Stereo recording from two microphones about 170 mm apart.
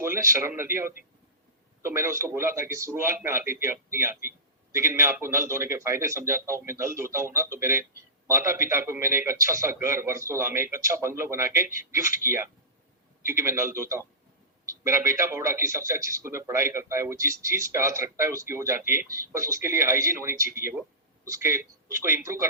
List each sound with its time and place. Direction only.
0.0 s a man's voice: 15° right (ahead or behind)